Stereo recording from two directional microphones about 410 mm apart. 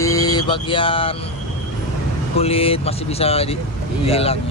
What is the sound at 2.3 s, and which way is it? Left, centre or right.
Speech, centre.